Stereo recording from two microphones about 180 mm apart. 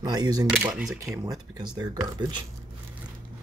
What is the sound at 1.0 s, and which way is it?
Speech, 15° right (ahead or behind).